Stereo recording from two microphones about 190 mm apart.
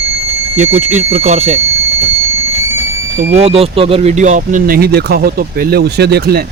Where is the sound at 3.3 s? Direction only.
30° right (ahead or behind).